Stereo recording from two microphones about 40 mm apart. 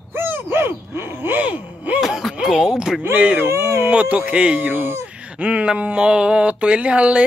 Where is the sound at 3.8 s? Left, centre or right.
Right.